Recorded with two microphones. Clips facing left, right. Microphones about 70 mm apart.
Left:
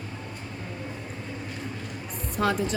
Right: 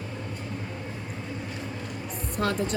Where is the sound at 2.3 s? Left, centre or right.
Centre.